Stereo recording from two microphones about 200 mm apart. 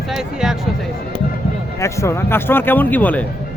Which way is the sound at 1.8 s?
15° left (ahead or behind).